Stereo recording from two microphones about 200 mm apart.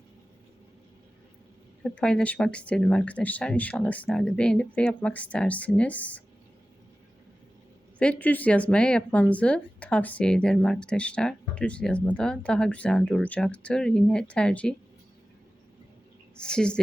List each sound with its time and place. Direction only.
1.8 s speech: 5° left (ahead or behind)
7.9 s speech: 5° left (ahead or behind)
16.4 s speech: 5° left (ahead or behind)